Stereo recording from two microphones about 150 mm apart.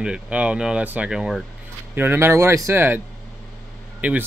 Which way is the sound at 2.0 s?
15° right (ahead or behind).